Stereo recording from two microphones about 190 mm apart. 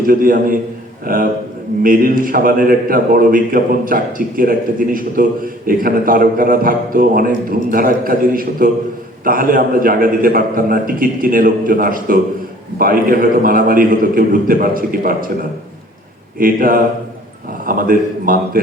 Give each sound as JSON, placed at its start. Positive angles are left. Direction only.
{"t": 0.0, "sound": "a man's voice", "side_deg": -50}
{"t": 16.4, "sound": "a man's voice", "side_deg": -50}